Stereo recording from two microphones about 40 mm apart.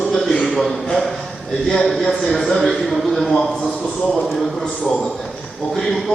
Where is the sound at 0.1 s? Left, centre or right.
Centre.